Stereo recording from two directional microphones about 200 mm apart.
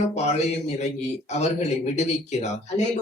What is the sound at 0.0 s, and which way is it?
Speech, 35° left (ahead or behind).